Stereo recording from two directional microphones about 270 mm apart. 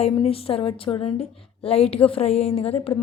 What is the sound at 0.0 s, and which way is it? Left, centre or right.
A woman's voice, left.